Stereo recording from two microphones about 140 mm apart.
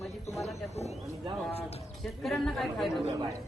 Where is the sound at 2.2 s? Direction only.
Centre (ahead or behind).